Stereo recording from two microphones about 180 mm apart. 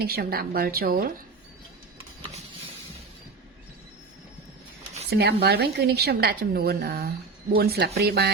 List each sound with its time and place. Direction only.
0.0 s a woman's voice: 60° right (ahead or behind)
5.0 s a woman's voice: 65° right (ahead or behind)